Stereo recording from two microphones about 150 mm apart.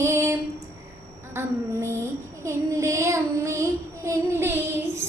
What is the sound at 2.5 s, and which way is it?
Child singing, 20° right (ahead or behind).